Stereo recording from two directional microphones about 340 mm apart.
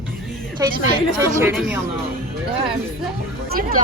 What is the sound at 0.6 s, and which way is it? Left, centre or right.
A woman's voice, centre.